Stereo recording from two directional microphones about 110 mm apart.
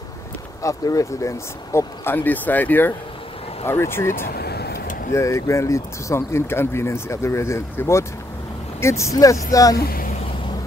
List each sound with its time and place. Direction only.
0.6 s speech: 30° left (ahead or behind)